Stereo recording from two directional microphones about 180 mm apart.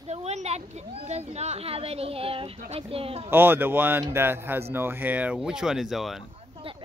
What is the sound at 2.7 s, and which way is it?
Speech, 30° right (ahead or behind).